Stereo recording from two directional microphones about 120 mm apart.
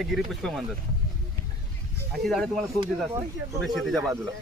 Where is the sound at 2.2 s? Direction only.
Centre (ahead or behind).